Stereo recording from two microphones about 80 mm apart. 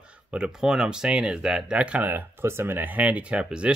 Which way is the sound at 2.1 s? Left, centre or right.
Right.